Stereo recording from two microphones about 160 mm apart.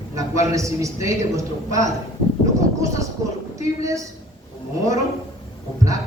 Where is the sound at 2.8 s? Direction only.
20° right (ahead or behind).